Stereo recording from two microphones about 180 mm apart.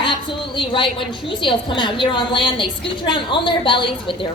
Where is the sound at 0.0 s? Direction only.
25° left (ahead or behind).